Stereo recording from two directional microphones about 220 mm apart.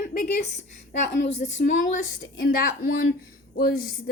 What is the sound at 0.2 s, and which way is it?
A woman's voice, 40° left (ahead or behind).